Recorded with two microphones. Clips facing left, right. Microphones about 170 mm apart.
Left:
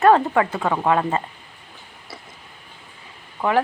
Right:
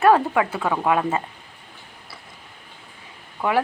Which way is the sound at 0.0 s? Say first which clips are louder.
Left 1 dB; 5° right (ahead or behind).